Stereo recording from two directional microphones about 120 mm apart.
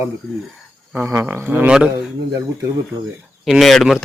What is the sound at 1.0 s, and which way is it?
Speech, 20° right (ahead or behind).